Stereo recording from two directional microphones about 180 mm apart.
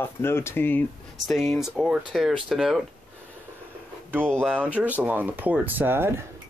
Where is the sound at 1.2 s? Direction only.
Centre (ahead or behind).